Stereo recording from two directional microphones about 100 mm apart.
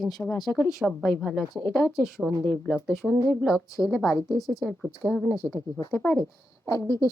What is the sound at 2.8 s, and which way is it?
Speech, centre (ahead or behind).